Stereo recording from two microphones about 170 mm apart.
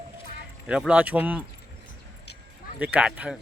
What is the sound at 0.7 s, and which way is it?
Speech, 5° right (ahead or behind).